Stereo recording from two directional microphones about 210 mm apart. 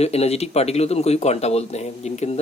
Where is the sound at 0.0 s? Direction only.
30° left (ahead or behind).